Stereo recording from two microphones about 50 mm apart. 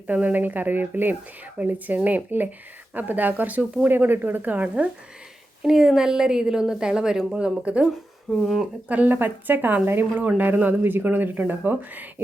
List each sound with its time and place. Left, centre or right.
0.1 s a woman's voice: right
3.8 s a woman's voice: right
5.6 s a woman's voice: centre
7.3 s speech: right
8.3 s speech: centre
8.9 s a woman's voice: right